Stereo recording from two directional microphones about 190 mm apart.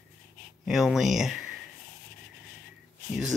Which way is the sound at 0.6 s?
Centre (ahead or behind).